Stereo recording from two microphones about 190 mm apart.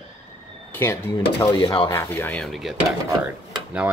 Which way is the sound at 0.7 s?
15° left (ahead or behind).